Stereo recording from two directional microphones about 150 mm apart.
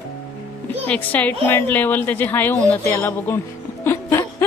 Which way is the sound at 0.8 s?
10° left (ahead or behind).